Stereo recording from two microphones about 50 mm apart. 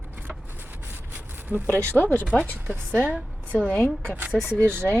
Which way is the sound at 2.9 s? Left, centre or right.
Right.